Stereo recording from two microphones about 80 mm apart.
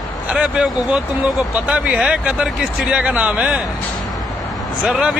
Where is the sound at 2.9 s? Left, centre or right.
Centre.